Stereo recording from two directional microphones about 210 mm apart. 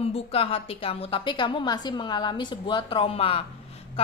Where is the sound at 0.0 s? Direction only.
30° left (ahead or behind).